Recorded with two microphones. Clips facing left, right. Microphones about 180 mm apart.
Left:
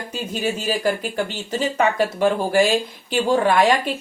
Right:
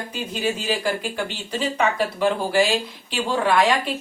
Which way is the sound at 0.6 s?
45° left (ahead or behind).